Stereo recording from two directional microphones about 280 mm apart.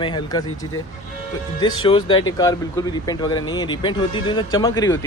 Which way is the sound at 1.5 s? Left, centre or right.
Centre.